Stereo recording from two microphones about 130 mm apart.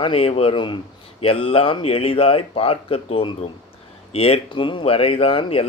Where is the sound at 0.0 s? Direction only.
45° left (ahead or behind).